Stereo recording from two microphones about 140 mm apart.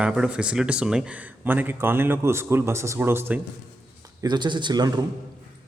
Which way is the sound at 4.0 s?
30° right (ahead or behind).